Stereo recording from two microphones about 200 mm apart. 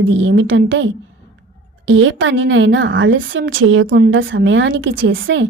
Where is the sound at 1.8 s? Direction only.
70° right (ahead or behind).